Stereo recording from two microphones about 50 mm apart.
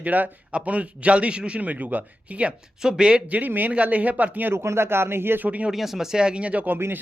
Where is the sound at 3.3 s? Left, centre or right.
Right.